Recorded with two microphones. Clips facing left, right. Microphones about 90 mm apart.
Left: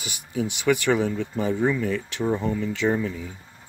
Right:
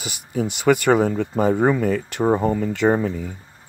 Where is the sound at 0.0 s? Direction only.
45° right (ahead or behind).